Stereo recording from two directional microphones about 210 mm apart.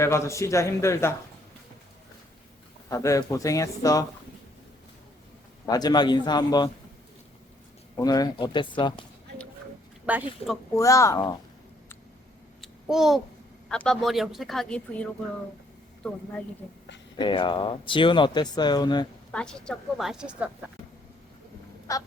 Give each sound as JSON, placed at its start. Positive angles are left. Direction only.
{"t": 0.0, "sound": "a man's voice", "side_deg": 15}
{"t": 2.9, "sound": "a man's voice", "side_deg": 15}
{"t": 5.6, "sound": "speech", "side_deg": 20}
{"t": 7.9, "sound": "a man's voice", "side_deg": 20}
{"t": 10.1, "sound": "speech", "side_deg": -5}
{"t": 10.8, "sound": "a man's voice", "side_deg": 15}
{"t": 12.6, "sound": "babbling", "side_deg": 0}
{"t": 13.7, "sound": "speech", "side_deg": 5}
{"t": 17.2, "sound": "speech", "side_deg": 20}
{"t": 19.3, "sound": "speech", "side_deg": 5}
{"t": 21.9, "sound": "a man's voice", "side_deg": 15}